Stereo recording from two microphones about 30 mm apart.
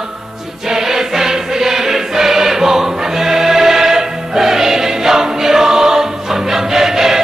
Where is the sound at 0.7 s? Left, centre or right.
Centre.